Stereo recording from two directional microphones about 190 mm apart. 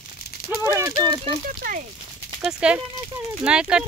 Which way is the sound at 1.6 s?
45° right (ahead or behind).